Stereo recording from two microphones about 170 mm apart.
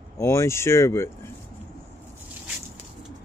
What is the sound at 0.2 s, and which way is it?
Speech, 15° left (ahead or behind).